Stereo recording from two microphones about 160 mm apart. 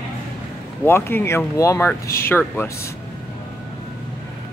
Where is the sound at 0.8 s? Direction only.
15° left (ahead or behind).